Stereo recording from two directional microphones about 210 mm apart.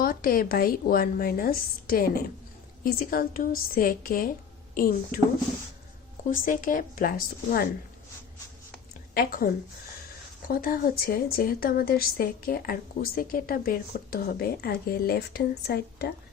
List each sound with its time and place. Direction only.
0.0 s a woman's voice: 45° left (ahead or behind)
6.3 s a woman's voice: 40° left (ahead or behind)
9.1 s a woman's voice: 45° left (ahead or behind)
10.5 s a woman's voice: 45° left (ahead or behind)